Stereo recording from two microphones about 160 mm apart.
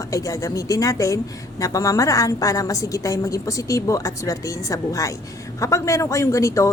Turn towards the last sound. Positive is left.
turn(degrees=20)  # may be behind; listen again after turning